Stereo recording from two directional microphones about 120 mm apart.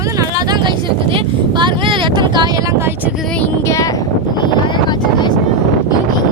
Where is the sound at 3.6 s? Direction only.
25° left (ahead or behind).